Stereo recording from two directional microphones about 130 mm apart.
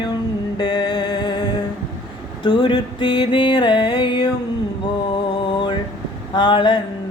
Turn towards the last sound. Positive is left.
turn(degrees=35)  # may be behind; listen again after turning